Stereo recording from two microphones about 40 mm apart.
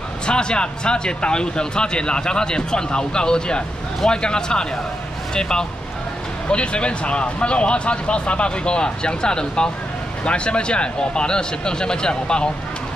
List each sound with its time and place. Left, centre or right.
0.3 s speech: left